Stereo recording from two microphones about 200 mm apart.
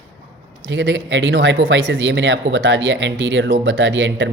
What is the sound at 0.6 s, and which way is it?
Speech, 60° right (ahead or behind).